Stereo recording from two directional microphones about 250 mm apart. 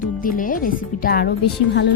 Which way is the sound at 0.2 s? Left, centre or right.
Left.